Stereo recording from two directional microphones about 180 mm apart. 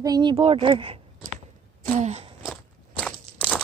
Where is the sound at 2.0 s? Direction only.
40° right (ahead or behind).